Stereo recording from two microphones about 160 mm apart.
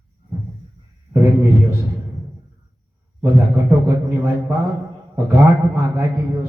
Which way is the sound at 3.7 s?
15° right (ahead or behind).